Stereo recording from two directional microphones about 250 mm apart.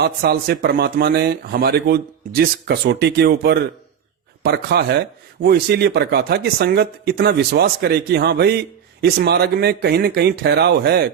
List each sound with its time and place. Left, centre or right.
0.0 s speech: right